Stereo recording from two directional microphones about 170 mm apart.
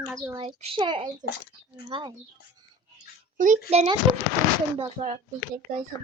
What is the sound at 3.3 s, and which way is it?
Speech, 45° right (ahead or behind).